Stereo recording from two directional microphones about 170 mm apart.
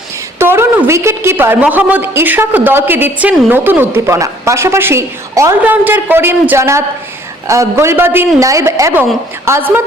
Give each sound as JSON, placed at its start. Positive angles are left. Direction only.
{"t": 0.3, "sound": "a woman's voice", "side_deg": -15}